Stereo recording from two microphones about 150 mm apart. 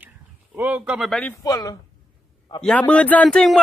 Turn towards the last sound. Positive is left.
turn(degrees=5)  # may be behind; listen again after turning